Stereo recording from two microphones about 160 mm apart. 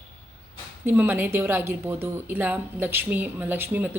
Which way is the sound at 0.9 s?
10° right (ahead or behind).